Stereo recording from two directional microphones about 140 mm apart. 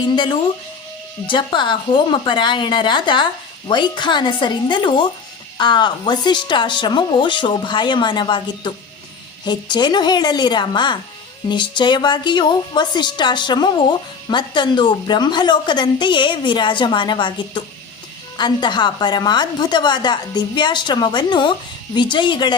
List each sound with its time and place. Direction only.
0.0 s a woman's voice: 35° left (ahead or behind)